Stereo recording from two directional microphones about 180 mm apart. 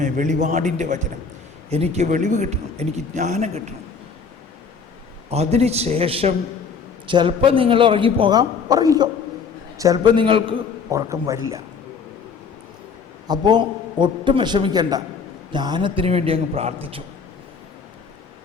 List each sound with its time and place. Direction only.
0.0 s a man's voice: 45° right (ahead or behind)
5.3 s a man's voice: 35° right (ahead or behind)
10.9 s a man's voice: 15° right (ahead or behind)
13.2 s a man's voice: 25° right (ahead or behind)